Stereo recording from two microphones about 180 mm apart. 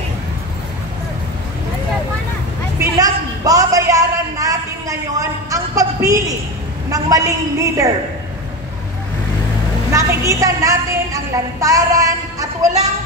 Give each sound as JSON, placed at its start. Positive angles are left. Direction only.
{"t": 2.8, "sound": "a sound", "side_deg": -20}
{"t": 6.9, "sound": "a woman's voice", "side_deg": -20}
{"t": 9.9, "sound": "a woman's voice", "side_deg": -20}